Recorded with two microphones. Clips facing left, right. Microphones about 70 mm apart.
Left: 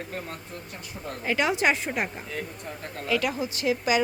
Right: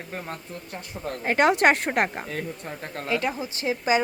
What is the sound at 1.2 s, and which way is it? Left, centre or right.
Speech, right.